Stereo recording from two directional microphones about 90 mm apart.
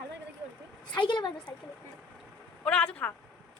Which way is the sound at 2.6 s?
10° left (ahead or behind).